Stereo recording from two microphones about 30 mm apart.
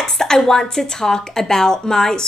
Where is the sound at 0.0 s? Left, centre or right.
Left.